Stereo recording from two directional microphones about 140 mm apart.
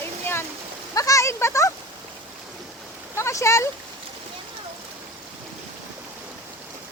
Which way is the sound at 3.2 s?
20° left (ahead or behind).